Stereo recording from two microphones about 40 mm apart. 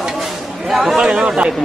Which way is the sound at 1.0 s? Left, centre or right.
Right.